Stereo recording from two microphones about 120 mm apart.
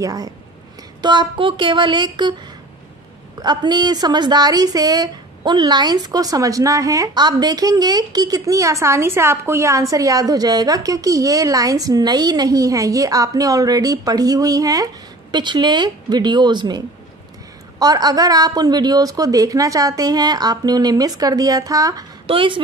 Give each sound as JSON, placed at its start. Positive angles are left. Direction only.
{"t": 0.0, "sound": "speech", "side_deg": -30}
{"t": 3.3, "sound": "speech", "side_deg": -35}
{"t": 22.2, "sound": "speech", "side_deg": -50}